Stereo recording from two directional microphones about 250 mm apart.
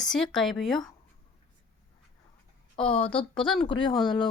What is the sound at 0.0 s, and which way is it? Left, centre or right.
Speech, centre.